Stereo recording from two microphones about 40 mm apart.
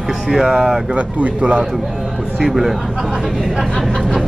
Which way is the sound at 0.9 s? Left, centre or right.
Right.